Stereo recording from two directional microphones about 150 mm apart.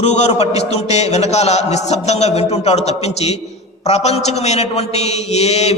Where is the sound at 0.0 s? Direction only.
45° left (ahead or behind).